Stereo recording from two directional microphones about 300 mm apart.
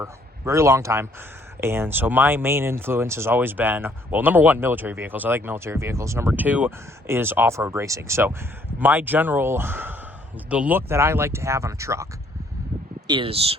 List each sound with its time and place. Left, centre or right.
0.0 s speech: centre
13.1 s speech: centre